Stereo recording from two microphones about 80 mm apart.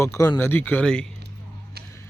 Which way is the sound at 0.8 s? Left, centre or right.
Centre.